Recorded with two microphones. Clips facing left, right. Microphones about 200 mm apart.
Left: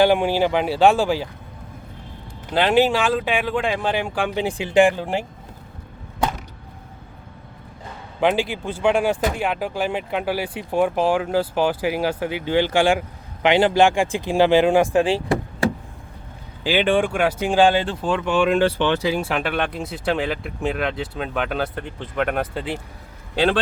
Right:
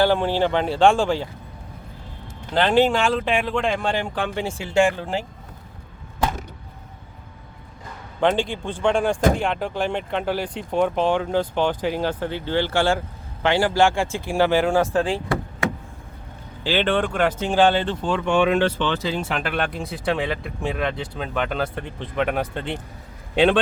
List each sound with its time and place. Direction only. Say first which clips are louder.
0.0 s speech: left 2 dB; 15° left (ahead or behind)
2.5 s speech: left 1 dB; 10° left (ahead or behind)
8.2 s speech: left 1 dB; 5° left (ahead or behind)
16.6 s speech: left 2 dB; 10° left (ahead or behind)
18.8 s speech: left 4 dB; 15° left (ahead or behind)